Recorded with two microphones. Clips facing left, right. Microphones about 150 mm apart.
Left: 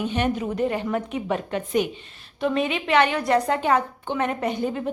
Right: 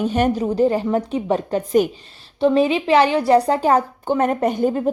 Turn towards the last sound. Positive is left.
turn(degrees=-45)  # may be behind; listen again after turning